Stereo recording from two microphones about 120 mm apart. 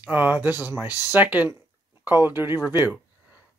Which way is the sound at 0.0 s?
15° right (ahead or behind).